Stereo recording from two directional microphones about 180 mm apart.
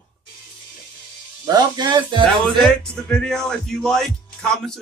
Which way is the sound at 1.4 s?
20° right (ahead or behind).